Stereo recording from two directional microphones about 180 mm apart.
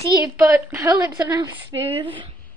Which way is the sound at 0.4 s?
15° right (ahead or behind).